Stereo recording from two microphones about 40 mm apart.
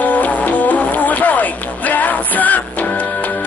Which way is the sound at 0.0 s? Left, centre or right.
Left.